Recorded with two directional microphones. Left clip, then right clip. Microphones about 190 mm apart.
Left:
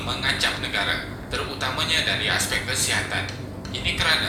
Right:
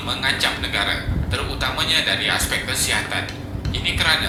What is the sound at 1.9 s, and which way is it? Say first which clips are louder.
A woman's voice: right 3 dB; 20° right (ahead or behind).